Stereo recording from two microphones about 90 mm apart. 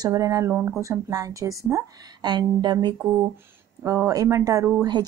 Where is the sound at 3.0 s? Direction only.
25° right (ahead or behind).